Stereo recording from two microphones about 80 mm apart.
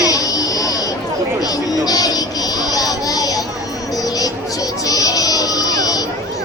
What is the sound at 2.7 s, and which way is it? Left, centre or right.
Children playing, left.